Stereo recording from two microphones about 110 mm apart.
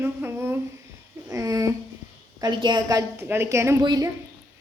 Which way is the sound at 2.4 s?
40° right (ahead or behind).